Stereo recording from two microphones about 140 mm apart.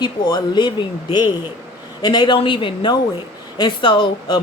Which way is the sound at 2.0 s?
30° left (ahead or behind).